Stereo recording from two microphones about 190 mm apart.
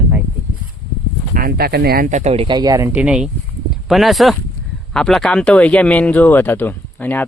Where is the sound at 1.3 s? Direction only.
50° right (ahead or behind).